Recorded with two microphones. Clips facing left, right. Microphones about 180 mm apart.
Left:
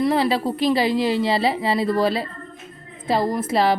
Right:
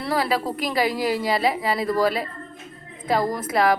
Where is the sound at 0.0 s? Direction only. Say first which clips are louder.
Left 4 dB; 25° left (ahead or behind).